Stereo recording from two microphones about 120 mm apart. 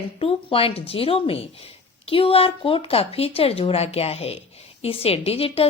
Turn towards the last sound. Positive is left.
turn(degrees=55)  # may be behind; listen again after turning